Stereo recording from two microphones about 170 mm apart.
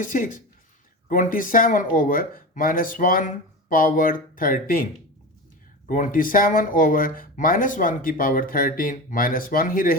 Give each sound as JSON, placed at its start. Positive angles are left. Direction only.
{"t": 0.0, "sound": "speech", "side_deg": 50}
{"t": 5.9, "sound": "speech", "side_deg": 50}